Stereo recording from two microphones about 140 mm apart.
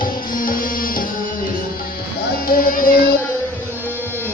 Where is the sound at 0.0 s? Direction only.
90° left.